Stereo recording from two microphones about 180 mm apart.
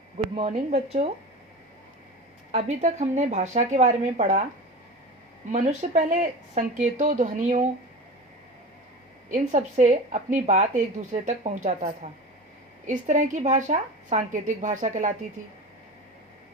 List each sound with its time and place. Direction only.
0.3 s speech: 35° right (ahead or behind)
2.5 s speech: 40° right (ahead or behind)
5.5 s speech: 40° right (ahead or behind)
9.3 s a woman's voice: 40° right (ahead or behind)